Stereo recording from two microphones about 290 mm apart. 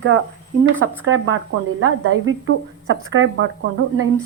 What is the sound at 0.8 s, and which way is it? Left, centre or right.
A woman's voice, right.